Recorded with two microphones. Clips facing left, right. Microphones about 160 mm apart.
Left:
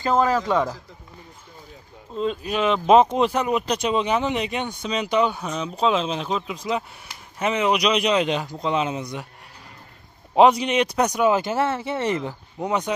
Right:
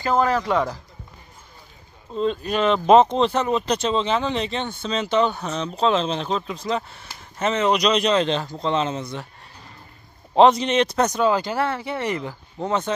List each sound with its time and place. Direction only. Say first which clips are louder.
2.1 s speech: right 2 dB; 5° left (ahead or behind)
10.3 s speech: right 1 dB; 10° left (ahead or behind)